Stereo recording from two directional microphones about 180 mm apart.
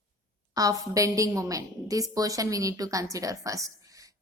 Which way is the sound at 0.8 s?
20° right (ahead or behind).